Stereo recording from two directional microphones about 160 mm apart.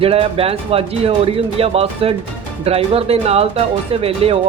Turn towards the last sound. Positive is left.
turn(degrees=-35)  # may be behind; listen again after turning